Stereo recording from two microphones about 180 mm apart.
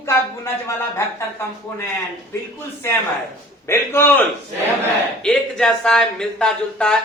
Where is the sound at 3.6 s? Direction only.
15° left (ahead or behind).